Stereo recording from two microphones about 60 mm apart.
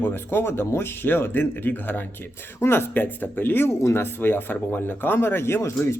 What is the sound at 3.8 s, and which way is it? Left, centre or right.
A man's voice, left.